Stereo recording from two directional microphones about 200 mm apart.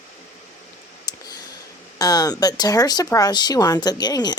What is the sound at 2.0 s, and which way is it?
Speech, 20° left (ahead or behind).